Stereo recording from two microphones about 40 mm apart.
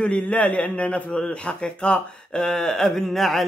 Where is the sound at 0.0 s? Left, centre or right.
Left.